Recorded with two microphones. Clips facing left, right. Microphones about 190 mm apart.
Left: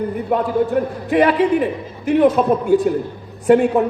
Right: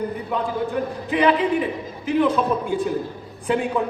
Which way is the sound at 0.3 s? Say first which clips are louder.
Left 9 dB; 45° left (ahead or behind).